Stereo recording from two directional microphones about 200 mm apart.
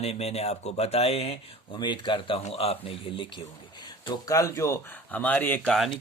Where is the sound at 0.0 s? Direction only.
30° left (ahead or behind).